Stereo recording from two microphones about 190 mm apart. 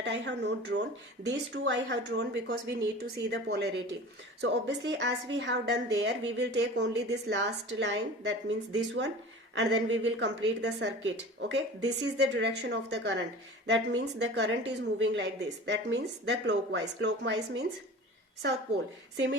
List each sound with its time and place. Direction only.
0.0 s a woman's voice: 65° right (ahead or behind)
9.6 s a woman's voice: 65° right (ahead or behind)
14.7 s a woman's voice: 75° right (ahead or behind)
19.1 s a woman's voice: 70° right (ahead or behind)